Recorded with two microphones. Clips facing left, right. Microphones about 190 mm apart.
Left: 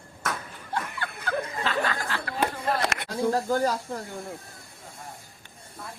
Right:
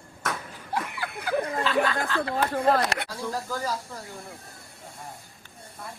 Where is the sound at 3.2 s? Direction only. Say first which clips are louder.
Left 10 dB; 55° left (ahead or behind).